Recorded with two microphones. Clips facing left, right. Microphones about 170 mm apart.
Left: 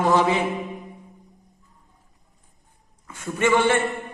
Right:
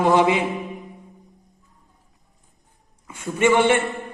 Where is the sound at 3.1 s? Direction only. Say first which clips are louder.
Right 2 dB; 15° right (ahead or behind).